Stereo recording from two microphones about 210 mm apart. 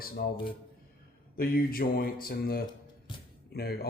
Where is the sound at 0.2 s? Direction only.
50° left (ahead or behind).